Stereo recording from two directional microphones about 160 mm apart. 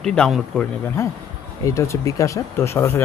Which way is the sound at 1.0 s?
20° left (ahead or behind).